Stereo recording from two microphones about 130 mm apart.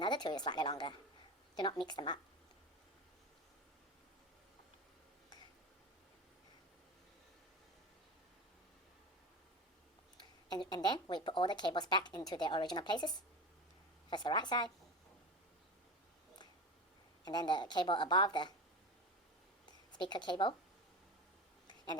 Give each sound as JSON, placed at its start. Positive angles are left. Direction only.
{"t": 0.0, "sound": "speech", "side_deg": 35}
{"t": 10.2, "sound": "speech", "side_deg": 35}
{"t": 17.2, "sound": "speech", "side_deg": 35}
{"t": 20.0, "sound": "speech", "side_deg": 35}